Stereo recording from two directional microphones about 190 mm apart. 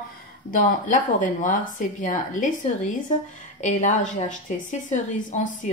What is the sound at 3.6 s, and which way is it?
A woman's voice, 40° left (ahead or behind).